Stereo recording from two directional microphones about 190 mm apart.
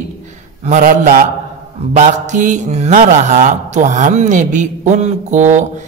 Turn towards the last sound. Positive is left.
turn(degrees=-40)  # may be behind; listen again after turning